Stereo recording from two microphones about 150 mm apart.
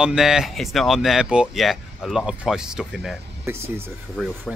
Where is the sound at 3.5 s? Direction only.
15° right (ahead or behind).